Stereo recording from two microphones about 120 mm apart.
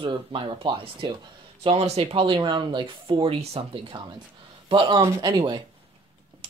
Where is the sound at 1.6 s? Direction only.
60° right (ahead or behind).